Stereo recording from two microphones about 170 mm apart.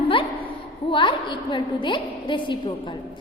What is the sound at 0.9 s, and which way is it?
A woman's voice, 30° left (ahead or behind).